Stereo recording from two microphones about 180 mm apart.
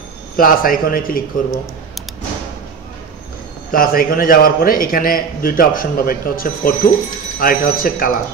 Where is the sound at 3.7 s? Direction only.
55° left (ahead or behind).